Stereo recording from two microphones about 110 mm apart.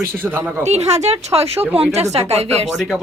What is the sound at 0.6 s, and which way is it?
Speech, 80° right.